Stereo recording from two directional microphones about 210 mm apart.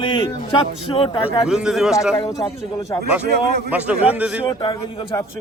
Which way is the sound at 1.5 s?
Centre (ahead or behind).